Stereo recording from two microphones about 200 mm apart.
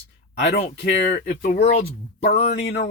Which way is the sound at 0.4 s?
55° left (ahead or behind).